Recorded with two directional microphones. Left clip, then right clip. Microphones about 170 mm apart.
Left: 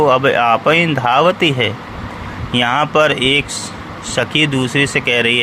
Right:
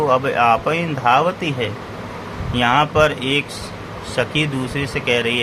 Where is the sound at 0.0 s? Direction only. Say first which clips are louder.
Left 4 dB; 25° left (ahead or behind).